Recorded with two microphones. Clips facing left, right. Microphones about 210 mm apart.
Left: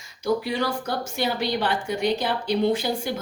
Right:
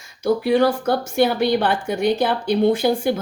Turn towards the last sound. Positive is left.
turn(degrees=-55)  # may be behind; listen again after turning